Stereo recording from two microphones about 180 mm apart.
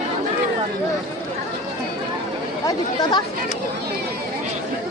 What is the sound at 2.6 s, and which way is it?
Speech, 25° left (ahead or behind).